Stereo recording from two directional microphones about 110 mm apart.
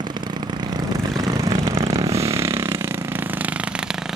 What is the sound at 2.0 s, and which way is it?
Vehicle, 25° right (ahead or behind).